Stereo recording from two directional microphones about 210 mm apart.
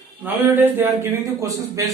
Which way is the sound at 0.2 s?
10° right (ahead or behind).